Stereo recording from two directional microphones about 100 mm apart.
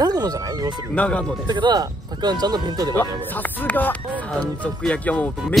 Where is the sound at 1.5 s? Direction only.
50° right (ahead or behind).